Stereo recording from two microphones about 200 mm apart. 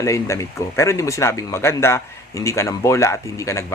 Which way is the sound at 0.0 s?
15° left (ahead or behind).